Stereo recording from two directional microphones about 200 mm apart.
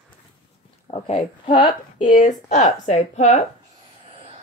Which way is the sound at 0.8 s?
30° left (ahead or behind).